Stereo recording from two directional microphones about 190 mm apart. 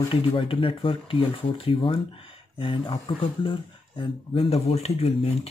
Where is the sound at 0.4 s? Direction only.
25° left (ahead or behind).